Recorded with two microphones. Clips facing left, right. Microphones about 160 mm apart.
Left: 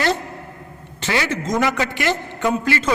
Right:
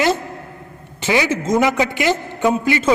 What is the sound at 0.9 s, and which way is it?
A man's voice, 15° right (ahead or behind).